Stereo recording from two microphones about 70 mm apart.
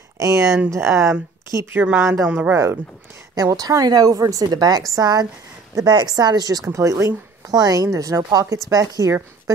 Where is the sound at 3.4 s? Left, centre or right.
Right.